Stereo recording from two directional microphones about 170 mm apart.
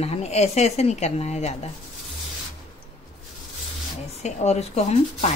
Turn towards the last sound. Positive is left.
turn(degrees=40)  # may be behind; listen again after turning